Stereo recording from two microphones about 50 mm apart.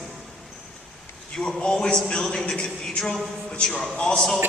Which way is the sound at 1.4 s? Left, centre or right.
Centre.